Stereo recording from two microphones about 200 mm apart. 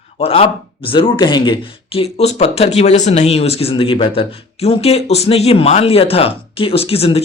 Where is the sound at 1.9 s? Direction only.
30° left (ahead or behind).